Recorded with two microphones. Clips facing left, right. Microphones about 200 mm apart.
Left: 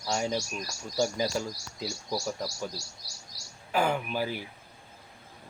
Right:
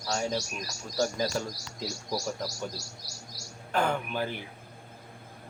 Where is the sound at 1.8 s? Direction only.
Centre (ahead or behind).